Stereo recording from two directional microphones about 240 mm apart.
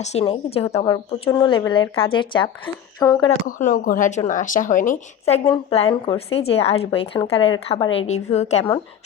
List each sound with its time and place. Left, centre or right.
0.0 s a woman's voice: left
3.4 s a woman's voice: left